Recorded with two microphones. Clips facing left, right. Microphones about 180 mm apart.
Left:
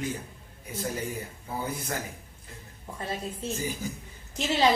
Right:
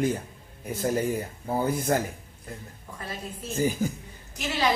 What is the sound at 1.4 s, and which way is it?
Speech, 50° right (ahead or behind).